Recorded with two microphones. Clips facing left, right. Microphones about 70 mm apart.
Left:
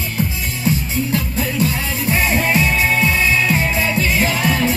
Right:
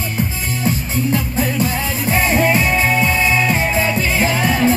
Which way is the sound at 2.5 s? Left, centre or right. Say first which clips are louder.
Right 1 dB; right.